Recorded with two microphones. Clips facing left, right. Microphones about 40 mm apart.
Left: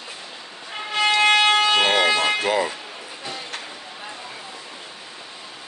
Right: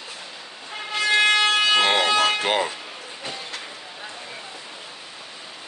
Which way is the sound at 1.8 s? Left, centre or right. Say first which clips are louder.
Left 1 dB; right.